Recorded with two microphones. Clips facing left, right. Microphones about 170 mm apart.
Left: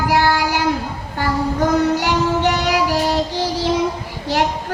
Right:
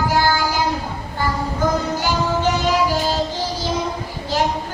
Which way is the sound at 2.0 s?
75° left (ahead or behind).